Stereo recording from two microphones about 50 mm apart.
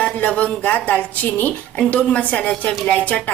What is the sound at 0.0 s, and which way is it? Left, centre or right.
Speech, left.